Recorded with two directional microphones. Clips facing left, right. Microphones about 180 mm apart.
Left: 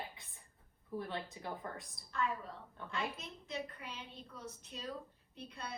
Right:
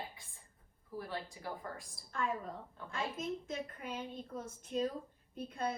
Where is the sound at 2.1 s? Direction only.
50° right (ahead or behind).